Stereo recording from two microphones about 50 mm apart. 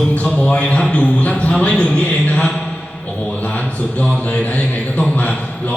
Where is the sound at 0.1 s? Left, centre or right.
Left.